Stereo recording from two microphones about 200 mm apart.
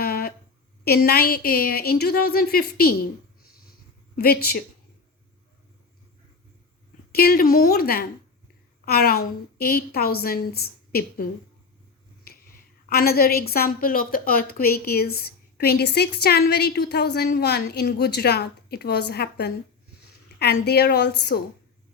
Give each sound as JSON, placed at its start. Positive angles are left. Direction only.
{"t": 0.0, "sound": "a sound", "side_deg": 50}
{"t": 0.9, "sound": "a woman's voice", "side_deg": 50}
{"t": 7.1, "sound": "a woman's voice", "side_deg": 50}
{"t": 12.9, "sound": "a woman's voice", "side_deg": 50}